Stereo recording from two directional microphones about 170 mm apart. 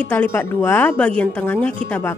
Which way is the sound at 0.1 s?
10° left (ahead or behind).